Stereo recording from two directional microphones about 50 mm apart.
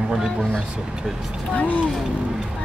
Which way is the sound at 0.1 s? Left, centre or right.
Centre.